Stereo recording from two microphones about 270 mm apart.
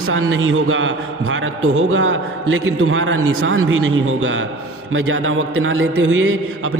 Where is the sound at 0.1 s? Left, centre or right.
Right.